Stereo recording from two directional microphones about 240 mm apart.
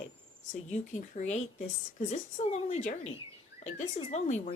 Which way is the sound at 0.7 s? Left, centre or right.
Left.